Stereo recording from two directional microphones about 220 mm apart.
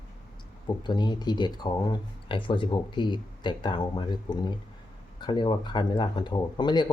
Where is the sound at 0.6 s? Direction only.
20° left (ahead or behind).